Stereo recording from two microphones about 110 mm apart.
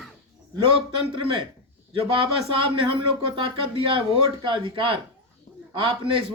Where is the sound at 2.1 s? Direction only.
50° right (ahead or behind).